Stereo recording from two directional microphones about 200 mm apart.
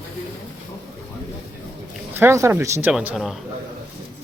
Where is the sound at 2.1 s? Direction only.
10° right (ahead or behind).